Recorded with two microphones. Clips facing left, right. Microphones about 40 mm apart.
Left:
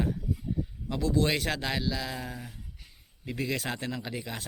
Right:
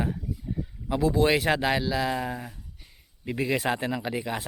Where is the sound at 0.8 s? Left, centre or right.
Centre.